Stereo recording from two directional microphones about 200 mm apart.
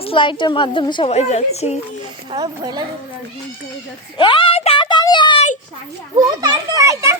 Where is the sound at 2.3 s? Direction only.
20° right (ahead or behind).